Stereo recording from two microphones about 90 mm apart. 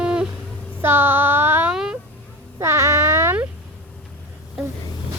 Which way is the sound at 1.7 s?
5° right (ahead or behind).